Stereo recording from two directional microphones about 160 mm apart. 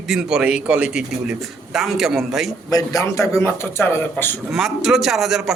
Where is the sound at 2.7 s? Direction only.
20° left (ahead or behind).